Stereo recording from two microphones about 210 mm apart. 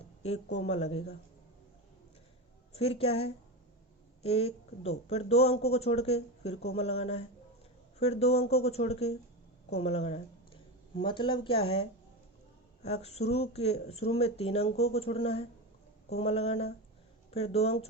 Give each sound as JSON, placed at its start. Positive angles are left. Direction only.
{"t": 0.5, "sound": "speech", "side_deg": 30}
{"t": 2.7, "sound": "speech", "side_deg": 30}